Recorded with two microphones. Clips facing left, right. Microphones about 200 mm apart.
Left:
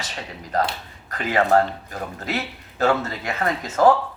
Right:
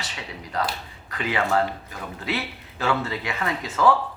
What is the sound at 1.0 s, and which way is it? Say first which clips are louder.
Speech: left 4 dB; 45° left (ahead or behind).